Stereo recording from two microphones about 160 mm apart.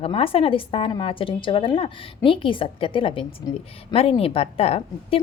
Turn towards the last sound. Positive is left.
turn(degrees=35)  # may be behind; listen again after turning